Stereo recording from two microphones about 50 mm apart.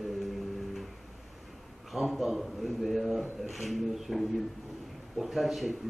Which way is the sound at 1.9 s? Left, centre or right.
Centre.